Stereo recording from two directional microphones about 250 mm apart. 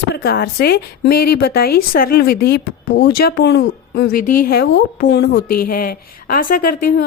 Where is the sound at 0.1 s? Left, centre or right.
Left.